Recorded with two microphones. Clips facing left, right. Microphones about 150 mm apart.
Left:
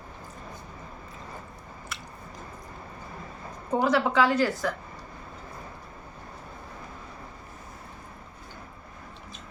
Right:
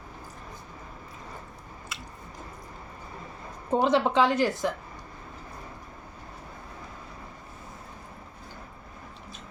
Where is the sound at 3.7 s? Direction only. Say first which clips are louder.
Right 1 dB; 25° right (ahead or behind).